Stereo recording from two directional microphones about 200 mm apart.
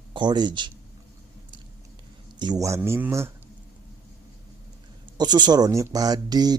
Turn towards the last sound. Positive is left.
turn(degrees=-20)  # may be behind; listen again after turning